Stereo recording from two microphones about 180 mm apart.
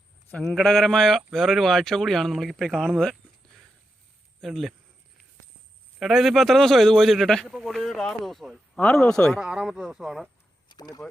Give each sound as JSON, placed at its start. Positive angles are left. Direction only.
{"t": 0.3, "sound": "a man's voice", "side_deg": 5}
{"t": 4.4, "sound": "speech", "side_deg": 0}
{"t": 6.0, "sound": "a man's voice", "side_deg": 0}
{"t": 10.7, "sound": "speech", "side_deg": 20}